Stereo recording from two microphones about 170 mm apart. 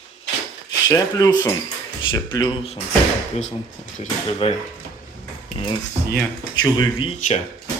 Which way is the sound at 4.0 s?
40° left (ahead or behind).